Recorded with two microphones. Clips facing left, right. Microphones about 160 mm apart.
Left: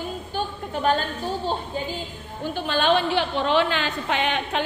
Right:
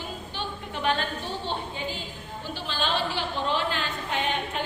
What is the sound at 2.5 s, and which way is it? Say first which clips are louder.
A woman's voice: left 8 dB; 55° left (ahead or behind).